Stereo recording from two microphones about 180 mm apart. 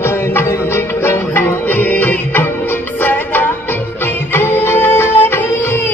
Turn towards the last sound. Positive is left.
turn(degrees=10)  # may be behind; listen again after turning